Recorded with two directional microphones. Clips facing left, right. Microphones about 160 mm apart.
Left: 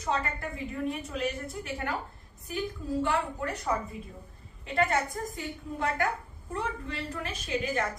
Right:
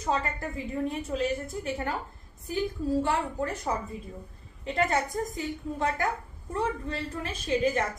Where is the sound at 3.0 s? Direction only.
30° right (ahead or behind).